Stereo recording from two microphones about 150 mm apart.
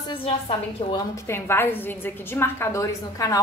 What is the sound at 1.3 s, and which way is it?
A woman's voice, 15° left (ahead or behind).